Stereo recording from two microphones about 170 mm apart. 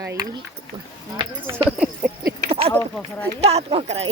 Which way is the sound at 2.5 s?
35° right (ahead or behind).